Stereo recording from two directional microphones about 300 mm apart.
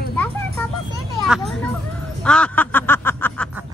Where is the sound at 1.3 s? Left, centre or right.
Centre.